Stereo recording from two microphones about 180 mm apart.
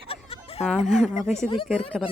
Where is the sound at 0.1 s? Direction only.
35° left (ahead or behind).